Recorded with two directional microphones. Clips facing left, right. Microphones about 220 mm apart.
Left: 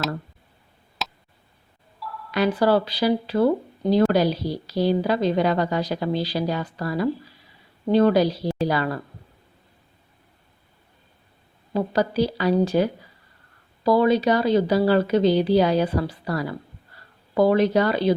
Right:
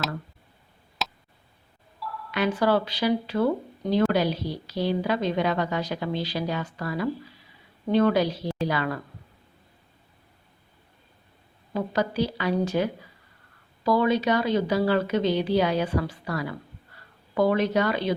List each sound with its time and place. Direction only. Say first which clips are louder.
1.0 s tick: even; centre (ahead or behind)
2.0 s a sound: even; centre (ahead or behind)
2.3 s speech: left 4 dB; 35° left (ahead or behind)
11.7 s speech: left 4 dB; 35° left (ahead or behind)